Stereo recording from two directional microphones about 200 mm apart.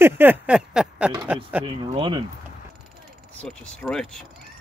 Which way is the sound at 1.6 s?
25° right (ahead or behind).